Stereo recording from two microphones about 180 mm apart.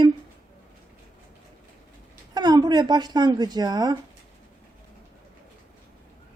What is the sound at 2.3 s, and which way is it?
Speech, 20° right (ahead or behind).